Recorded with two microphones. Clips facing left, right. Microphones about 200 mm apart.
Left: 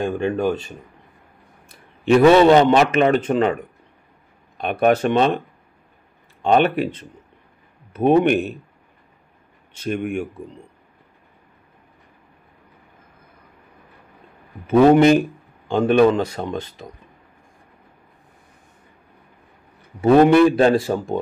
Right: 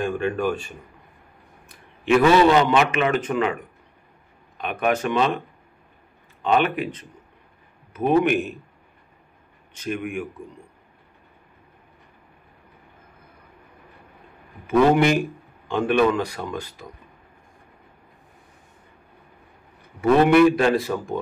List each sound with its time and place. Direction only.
0.0 s a man's voice: 25° left (ahead or behind)
1.7 s a man's voice: 35° left (ahead or behind)
4.6 s speech: 35° left (ahead or behind)
6.4 s a man's voice: 35° left (ahead or behind)
9.8 s speech: 35° left (ahead or behind)
14.7 s a man's voice: 35° left (ahead or behind)
20.0 s a man's voice: 30° left (ahead or behind)